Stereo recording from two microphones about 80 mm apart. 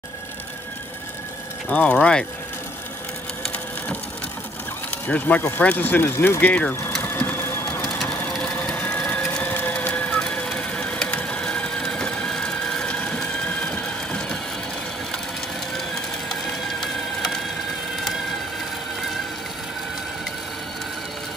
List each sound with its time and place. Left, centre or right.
1.7 s speech: left
5.0 s speech: left
6.4 s speech: left
7.2 s crushing: left
8.5 s crushing: centre